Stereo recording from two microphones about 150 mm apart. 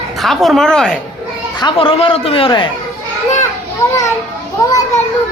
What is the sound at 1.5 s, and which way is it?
A man's voice, 35° left (ahead or behind).